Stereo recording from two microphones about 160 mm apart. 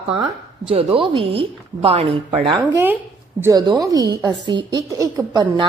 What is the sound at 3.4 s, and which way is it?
A woman's voice, 25° right (ahead or behind).